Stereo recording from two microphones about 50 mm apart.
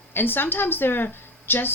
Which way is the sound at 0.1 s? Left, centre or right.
Left.